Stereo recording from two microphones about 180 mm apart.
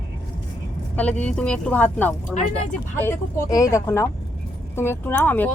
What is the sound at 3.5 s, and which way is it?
Speech, 15° left (ahead or behind).